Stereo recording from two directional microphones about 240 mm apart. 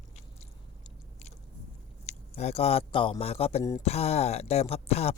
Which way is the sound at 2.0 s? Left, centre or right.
Left.